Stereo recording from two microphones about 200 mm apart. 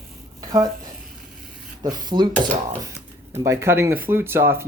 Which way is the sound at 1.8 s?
20° right (ahead or behind).